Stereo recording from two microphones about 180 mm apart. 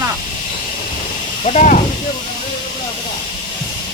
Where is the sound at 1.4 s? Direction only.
45° left (ahead or behind).